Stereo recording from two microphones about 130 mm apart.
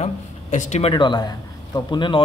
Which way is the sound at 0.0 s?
65° left (ahead or behind).